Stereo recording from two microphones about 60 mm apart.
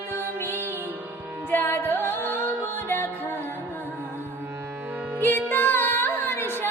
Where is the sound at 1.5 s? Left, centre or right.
Left.